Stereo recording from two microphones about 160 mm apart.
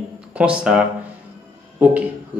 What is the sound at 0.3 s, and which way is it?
A man's voice, 10° right (ahead or behind).